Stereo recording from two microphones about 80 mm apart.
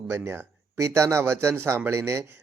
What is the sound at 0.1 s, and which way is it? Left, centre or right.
A man's voice, right.